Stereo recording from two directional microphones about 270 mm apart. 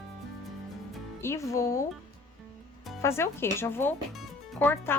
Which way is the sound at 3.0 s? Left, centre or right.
Centre.